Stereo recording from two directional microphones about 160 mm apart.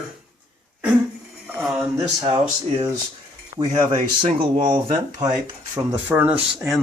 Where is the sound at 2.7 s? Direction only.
20° right (ahead or behind).